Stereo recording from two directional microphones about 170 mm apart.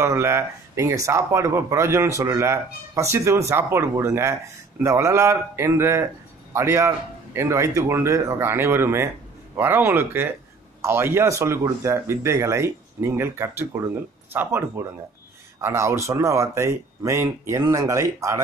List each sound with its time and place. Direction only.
0.0 s speech: 15° right (ahead or behind)